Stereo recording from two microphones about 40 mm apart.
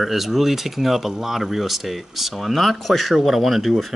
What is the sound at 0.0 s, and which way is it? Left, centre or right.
Speech, centre.